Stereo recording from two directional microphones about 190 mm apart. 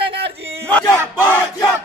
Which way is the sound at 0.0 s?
30° right (ahead or behind).